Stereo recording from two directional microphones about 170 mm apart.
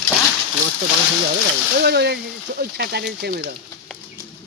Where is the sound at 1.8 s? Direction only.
75° right (ahead or behind).